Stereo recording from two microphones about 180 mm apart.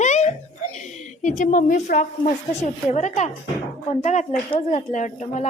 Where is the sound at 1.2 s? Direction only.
45° left (ahead or behind).